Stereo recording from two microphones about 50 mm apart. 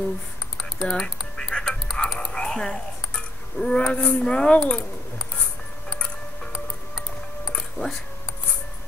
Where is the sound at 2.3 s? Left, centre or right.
Centre.